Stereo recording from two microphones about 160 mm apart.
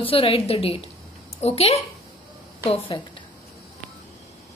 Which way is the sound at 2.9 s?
30° left (ahead or behind).